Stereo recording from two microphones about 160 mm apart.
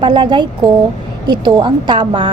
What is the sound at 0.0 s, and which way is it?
A woman's voice, 30° right (ahead or behind).